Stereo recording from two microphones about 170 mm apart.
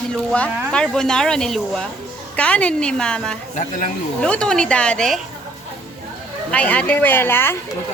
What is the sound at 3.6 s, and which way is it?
Speech, 50° left (ahead or behind).